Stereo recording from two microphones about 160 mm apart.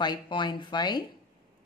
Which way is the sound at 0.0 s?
30° left (ahead or behind).